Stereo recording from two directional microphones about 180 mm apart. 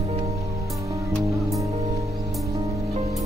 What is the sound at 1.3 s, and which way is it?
Music, centre (ahead or behind).